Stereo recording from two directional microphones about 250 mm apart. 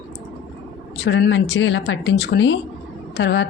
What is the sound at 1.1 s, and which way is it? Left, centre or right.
A woman's voice, left.